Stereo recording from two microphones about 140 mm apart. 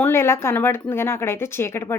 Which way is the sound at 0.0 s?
20° left (ahead or behind).